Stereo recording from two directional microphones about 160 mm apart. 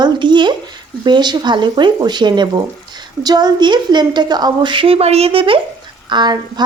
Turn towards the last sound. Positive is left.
turn(degrees=-25)  # may be behind; listen again after turning